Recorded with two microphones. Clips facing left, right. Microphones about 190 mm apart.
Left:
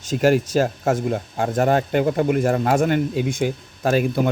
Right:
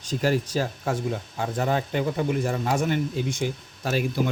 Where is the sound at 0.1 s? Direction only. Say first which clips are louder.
Left 7 dB; 65° left (ahead or behind).